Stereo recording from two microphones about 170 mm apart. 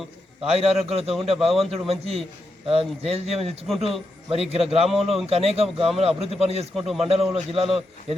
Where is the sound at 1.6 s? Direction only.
35° right (ahead or behind).